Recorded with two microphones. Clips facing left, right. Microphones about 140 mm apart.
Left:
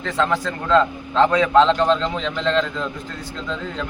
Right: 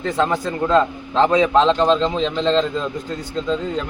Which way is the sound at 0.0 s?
20° right (ahead or behind).